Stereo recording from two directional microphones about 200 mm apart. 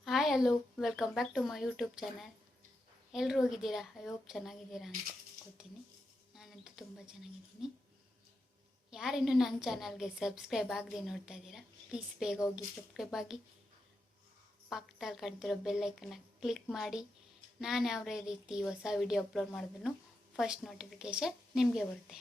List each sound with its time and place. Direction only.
0.0 s a woman's voice: centre (ahead or behind)
6.3 s a woman's voice: 5° right (ahead or behind)
8.9 s a woman's voice: 5° right (ahead or behind)
14.7 s a woman's voice: centre (ahead or behind)